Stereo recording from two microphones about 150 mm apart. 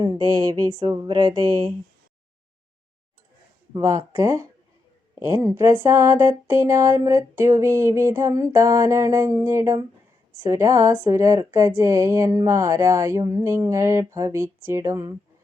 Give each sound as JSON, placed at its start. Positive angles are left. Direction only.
{"t": 0.9, "sound": "speech", "side_deg": -25}
{"t": 3.8, "sound": "speech", "side_deg": -20}